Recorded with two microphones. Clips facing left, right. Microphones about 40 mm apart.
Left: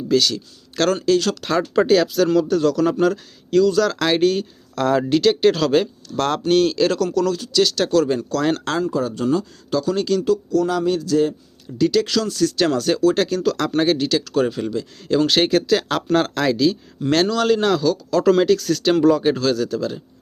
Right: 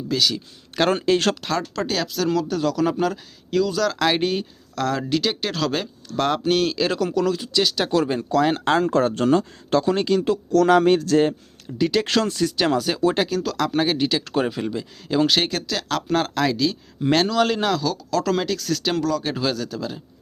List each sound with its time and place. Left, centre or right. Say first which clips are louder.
0.1 s a man's voice: left 4 dB; centre
0.3 s a man's voice: even; centre
0.9 s speech: left 2 dB; right
1.4 s a man's voice: left 7 dB; centre
4.7 s a man's voice: left 5 dB; centre
8.8 s speech: right 2 dB; right
10.5 s a man's voice: right 3 dB; right
11.8 s speech: left 3 dB; right
12.0 s speech: left 1 dB; right
12.5 s a man's voice: left 2 dB; centre
14.0 s speech: left 2 dB; centre
15.3 s a man's voice: left 6 dB; centre